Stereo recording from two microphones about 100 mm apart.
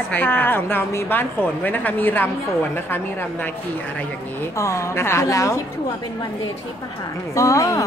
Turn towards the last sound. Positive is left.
turn(degrees=35)  # may be behind; listen again after turning